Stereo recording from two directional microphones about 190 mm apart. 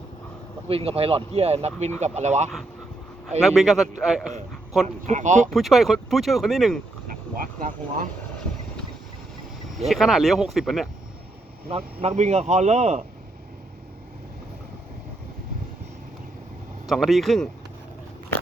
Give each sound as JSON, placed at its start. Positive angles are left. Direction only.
{"t": 0.7, "sound": "speech", "side_deg": -30}
{"t": 3.4, "sound": "speech", "side_deg": 0}
{"t": 5.0, "sound": "speech", "side_deg": -40}
{"t": 5.5, "sound": "speech", "side_deg": 0}
{"t": 7.1, "sound": "speech", "side_deg": -50}
{"t": 9.9, "sound": "speech", "side_deg": 0}
{"t": 11.7, "sound": "speech", "side_deg": -30}
{"t": 16.8, "sound": "speech", "side_deg": 0}